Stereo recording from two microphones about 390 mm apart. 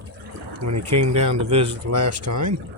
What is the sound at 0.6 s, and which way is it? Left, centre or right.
Speech, right.